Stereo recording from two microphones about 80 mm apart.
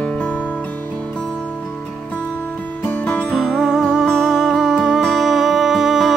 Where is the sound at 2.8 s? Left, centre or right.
Left.